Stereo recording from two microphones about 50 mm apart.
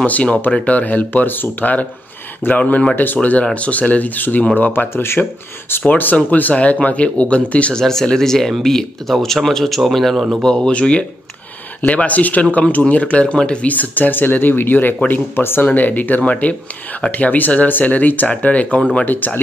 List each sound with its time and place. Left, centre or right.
0.0 s speech: left
2.6 s speech: centre; by 4.8 s left
4.9 s speech: left
5.9 s speech: left
7.7 s speech: centre
10.4 s speech: centre; by 15.7 s left
15.7 s speech: left